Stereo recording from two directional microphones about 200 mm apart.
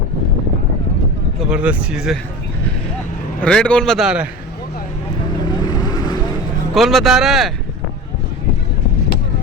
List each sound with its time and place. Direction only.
1.4 s a man's voice: 5° right (ahead or behind)
3.4 s a man's voice: 5° left (ahead or behind)
5.7 s vehicle: 20° left (ahead or behind)
6.7 s a man's voice: centre (ahead or behind)